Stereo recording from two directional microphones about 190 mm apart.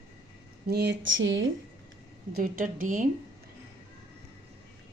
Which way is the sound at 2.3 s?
50° right (ahead or behind).